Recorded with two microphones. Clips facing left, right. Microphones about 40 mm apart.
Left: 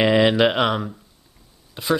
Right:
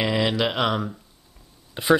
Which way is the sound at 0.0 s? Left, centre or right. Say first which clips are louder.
Left 6 dB; left.